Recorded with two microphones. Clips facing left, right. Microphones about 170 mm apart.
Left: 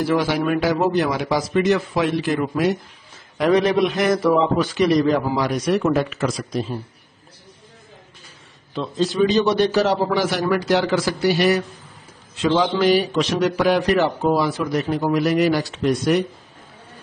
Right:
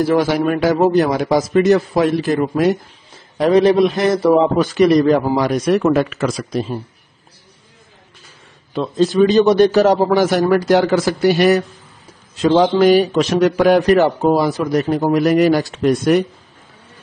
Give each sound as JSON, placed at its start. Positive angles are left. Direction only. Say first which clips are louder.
{"t": 0.0, "sound": "a man's voice", "louder": "right 5 dB", "side_deg": -45}
{"t": 4.7, "sound": "a man's voice", "louder": "right 6 dB", "side_deg": -50}
{"t": 8.7, "sound": "a man's voice", "louder": "right 6 dB", "side_deg": -50}